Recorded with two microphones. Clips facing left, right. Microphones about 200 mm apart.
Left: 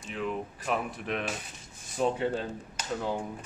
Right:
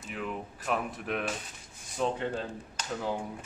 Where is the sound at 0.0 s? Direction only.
Centre (ahead or behind).